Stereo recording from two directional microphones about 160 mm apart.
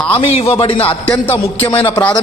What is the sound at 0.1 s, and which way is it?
Speech, 35° left (ahead or behind).